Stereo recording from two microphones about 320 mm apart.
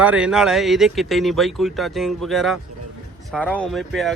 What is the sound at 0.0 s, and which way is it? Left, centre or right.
Speech, centre.